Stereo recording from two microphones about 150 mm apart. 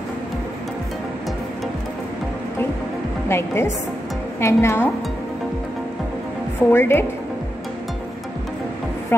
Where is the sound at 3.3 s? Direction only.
15° left (ahead or behind).